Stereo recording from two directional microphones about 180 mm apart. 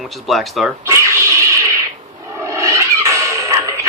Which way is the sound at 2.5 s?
15° right (ahead or behind).